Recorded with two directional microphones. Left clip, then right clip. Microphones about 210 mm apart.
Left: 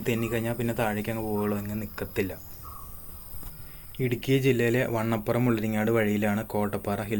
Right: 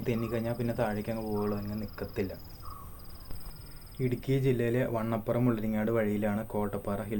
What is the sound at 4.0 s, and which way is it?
Speech, 25° left (ahead or behind).